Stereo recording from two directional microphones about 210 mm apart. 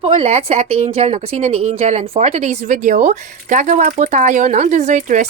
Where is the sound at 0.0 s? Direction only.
30° right (ahead or behind).